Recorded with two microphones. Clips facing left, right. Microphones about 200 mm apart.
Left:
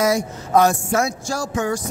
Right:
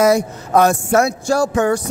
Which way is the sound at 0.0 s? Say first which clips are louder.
Right 5 dB; 60° right (ahead or behind).